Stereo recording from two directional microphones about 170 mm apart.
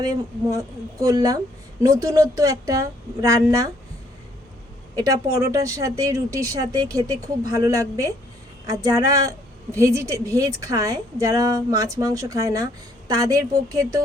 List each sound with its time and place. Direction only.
0.0 s speech: 20° right (ahead or behind)
4.9 s speech: 20° right (ahead or behind)